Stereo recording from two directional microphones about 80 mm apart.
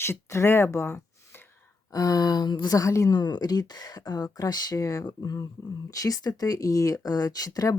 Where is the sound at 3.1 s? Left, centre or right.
Left.